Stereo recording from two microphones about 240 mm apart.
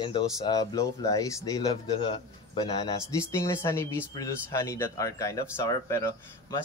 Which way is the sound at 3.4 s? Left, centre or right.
Centre.